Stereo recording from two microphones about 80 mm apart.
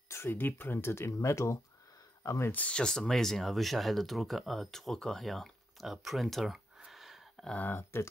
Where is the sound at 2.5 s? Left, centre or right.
Centre.